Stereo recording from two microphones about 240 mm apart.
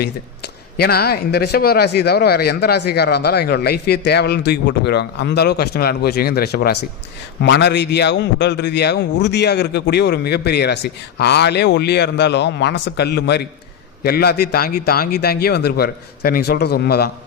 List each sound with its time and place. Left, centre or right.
0.8 s a man's voice: left